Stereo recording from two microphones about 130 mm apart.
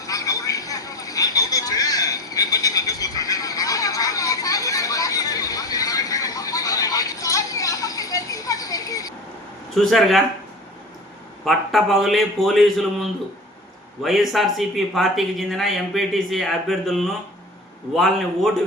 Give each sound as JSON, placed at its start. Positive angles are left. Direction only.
{"t": 0.0, "sound": "a sound", "side_deg": 25}
{"t": 9.7, "sound": "speech", "side_deg": 0}
{"t": 11.4, "sound": "speech", "side_deg": 0}